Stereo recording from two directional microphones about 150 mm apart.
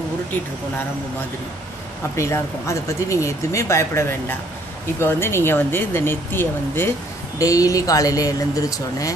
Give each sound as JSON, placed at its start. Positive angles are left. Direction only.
{"t": 2.1, "sound": "speech", "side_deg": 20}